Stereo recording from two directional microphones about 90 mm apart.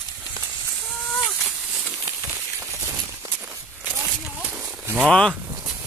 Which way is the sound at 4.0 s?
20° right (ahead or behind).